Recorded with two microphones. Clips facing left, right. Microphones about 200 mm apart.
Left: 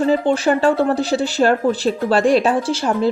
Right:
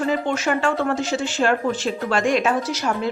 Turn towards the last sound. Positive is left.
turn(degrees=30)  # may be behind; listen again after turning